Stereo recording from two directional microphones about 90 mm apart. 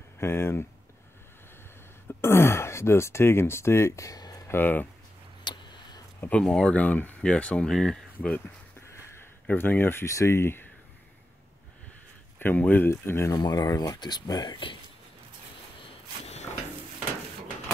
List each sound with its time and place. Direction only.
0.2 s speech: 30° left (ahead or behind)
2.0 s speech: 25° left (ahead or behind); by 4.5 s 45° left (ahead or behind)
4.5 s speech: 20° left (ahead or behind)
5.4 s a sound: 55° left (ahead or behind)
6.4 s speech: 10° left (ahead or behind)
9.5 s speech: 20° left (ahead or behind)
12.4 s speech: 20° left (ahead or behind)
13.3 s speech: 45° left (ahead or behind)